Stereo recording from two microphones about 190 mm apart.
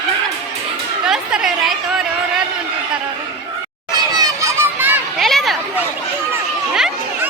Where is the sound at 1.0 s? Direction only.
5° right (ahead or behind).